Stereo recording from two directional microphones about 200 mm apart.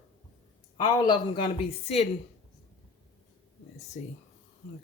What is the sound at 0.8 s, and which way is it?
Speech, 20° left (ahead or behind).